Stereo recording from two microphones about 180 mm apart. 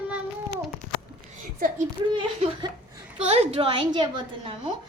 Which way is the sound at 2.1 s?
25° right (ahead or behind).